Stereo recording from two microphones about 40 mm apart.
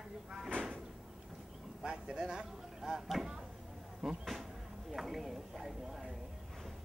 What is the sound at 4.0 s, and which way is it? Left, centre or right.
Speech, centre.